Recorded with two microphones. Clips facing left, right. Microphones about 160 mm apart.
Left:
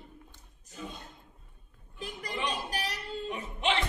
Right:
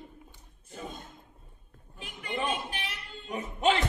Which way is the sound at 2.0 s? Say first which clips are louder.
Right 1 dB; 40° left (ahead or behind).